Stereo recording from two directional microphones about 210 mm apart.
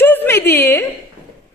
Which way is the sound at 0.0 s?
10° left (ahead or behind).